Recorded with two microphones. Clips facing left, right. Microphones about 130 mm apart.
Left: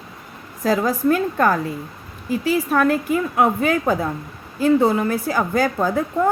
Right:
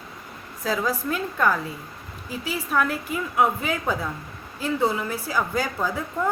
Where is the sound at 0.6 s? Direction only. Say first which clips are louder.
Left 7 dB; 45° left (ahead or behind).